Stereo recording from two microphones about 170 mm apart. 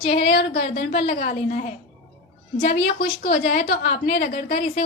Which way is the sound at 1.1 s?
55° left (ahead or behind).